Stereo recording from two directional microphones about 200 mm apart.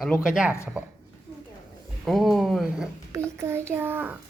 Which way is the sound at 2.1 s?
Centre (ahead or behind).